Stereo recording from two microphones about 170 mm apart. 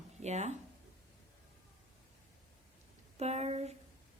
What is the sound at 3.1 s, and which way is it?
Speech, 40° right (ahead or behind).